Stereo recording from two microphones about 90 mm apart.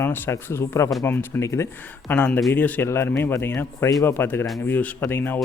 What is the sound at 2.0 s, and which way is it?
A man's voice, 20° left (ahead or behind).